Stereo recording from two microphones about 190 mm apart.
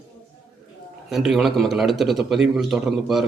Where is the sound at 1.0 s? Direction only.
Centre (ahead or behind).